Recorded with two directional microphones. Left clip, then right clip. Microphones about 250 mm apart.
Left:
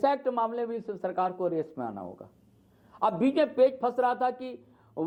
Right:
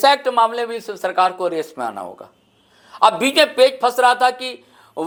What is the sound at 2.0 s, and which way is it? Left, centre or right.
Speech, right.